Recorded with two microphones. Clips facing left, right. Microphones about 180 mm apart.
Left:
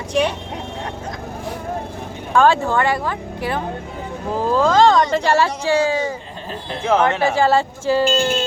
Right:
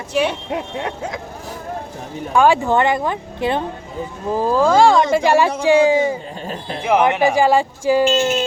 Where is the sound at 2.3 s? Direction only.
15° right (ahead or behind).